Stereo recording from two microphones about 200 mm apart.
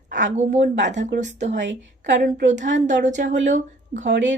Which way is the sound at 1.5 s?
65° right (ahead or behind).